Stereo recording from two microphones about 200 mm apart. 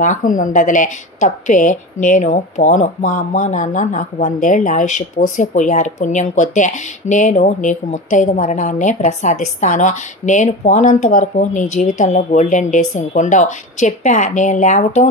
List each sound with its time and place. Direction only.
0.0 s a woman's voice: 40° left (ahead or behind)